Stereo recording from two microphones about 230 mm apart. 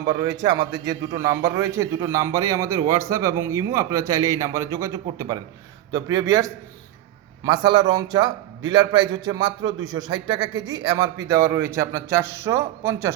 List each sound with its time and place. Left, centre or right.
0.1 s a man's voice: centre